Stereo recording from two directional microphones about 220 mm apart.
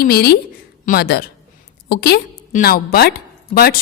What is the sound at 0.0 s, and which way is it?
A woman's voice, 45° left (ahead or behind).